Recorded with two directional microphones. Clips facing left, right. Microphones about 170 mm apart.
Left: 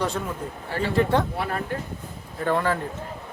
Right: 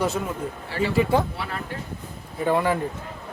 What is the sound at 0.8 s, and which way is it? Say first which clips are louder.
Speech: right 1 dB; 5° right (ahead or behind).